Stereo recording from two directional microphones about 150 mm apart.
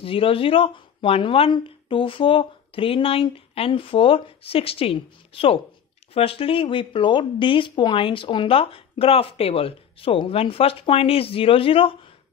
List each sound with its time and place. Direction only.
0.0 s speech: 40° left (ahead or behind)